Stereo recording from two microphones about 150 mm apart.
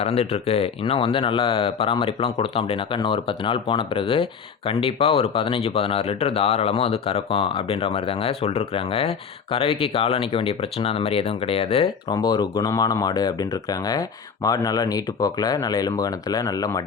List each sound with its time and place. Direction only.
0.0 s speech: 40° left (ahead or behind)
12.1 s speech: 25° left (ahead or behind)